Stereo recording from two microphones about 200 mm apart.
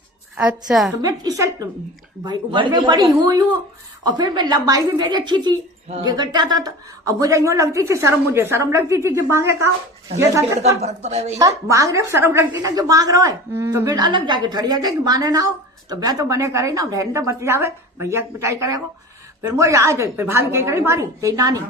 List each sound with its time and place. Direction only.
0.3 s a woman's voice: 5° right (ahead or behind)
1.0 s a woman's voice: 20° right (ahead or behind)
10.8 s speech: 35° right (ahead or behind)
11.3 s a woman's voice: 15° right (ahead or behind)